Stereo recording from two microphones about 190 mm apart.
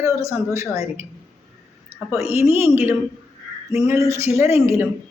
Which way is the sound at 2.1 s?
15° right (ahead or behind).